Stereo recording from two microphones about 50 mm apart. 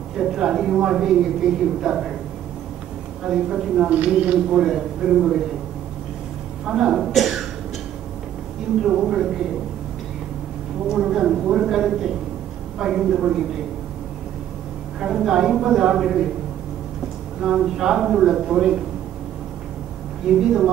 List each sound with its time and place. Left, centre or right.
0.2 s speech: centre
1.4 s speech: centre
1.8 s speech: centre
3.3 s speech: centre
6.6 s speech: centre
7.1 s speech: centre
8.8 s speech: centre
10.9 s speech: centre
15.0 s speech: centre
17.4 s speech: centre
20.3 s speech: centre